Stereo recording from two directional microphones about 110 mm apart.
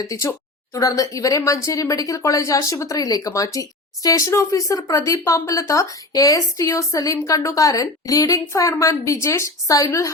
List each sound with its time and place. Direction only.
0.0 s a woman's voice: 30° left (ahead or behind)